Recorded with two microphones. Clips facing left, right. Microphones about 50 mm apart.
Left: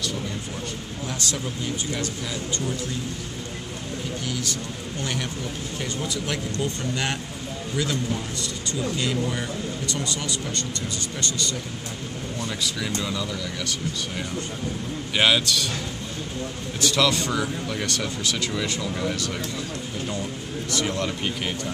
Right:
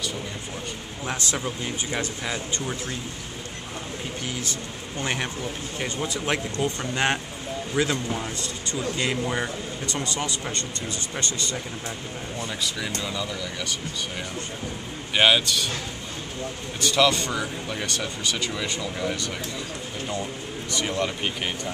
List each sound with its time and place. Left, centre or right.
1.0 s speech: right
4.3 s speech: right
12.6 s speech: centre
15.1 s speech: centre
16.8 s speech: centre
20.7 s speech: centre